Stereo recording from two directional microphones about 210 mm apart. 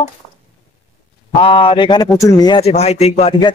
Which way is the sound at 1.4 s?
25° left (ahead or behind).